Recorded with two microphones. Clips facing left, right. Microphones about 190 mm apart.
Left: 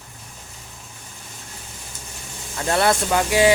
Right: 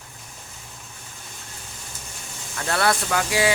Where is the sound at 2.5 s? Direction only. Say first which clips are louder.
Left 3 dB; 20° left (ahead or behind).